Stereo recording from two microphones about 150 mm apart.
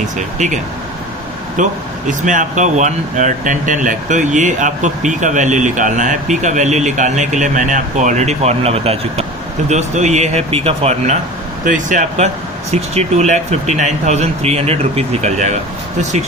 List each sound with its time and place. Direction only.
0.2 s speech: 55° right (ahead or behind)
2.0 s speech: 60° right (ahead or behind)
11.6 s speech: 60° right (ahead or behind)